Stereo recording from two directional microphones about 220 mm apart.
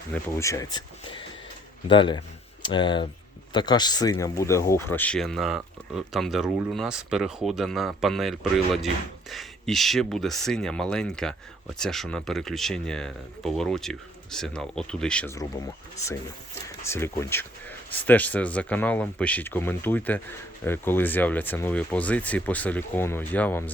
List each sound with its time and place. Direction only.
0.1 s speech: 15° left (ahead or behind)
16.8 s speech: 10° left (ahead or behind)